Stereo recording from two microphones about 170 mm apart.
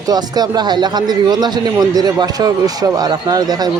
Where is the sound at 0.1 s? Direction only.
25° right (ahead or behind).